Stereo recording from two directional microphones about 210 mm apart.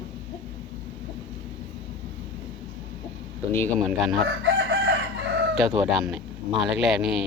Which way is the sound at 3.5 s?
10° left (ahead or behind).